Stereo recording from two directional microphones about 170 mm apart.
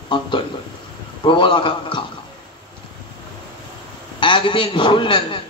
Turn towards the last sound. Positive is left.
turn(degrees=30)  # may be behind; listen again after turning